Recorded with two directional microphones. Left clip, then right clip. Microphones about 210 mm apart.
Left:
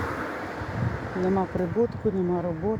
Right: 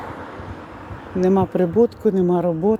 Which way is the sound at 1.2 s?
40° right (ahead or behind).